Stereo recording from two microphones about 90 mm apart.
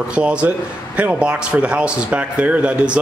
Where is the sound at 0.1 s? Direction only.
10° right (ahead or behind).